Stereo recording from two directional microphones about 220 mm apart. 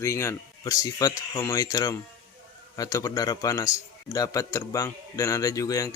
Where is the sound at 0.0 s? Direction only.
15° left (ahead or behind).